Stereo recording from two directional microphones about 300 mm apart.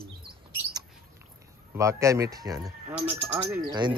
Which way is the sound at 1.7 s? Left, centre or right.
Centre.